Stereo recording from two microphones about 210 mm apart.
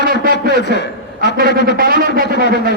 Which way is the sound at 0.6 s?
55° left (ahead or behind).